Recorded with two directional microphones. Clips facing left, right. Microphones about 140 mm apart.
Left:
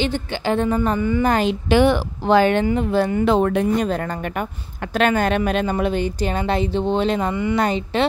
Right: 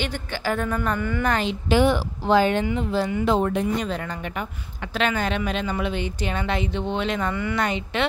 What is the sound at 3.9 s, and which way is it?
Speech, 45° left (ahead or behind).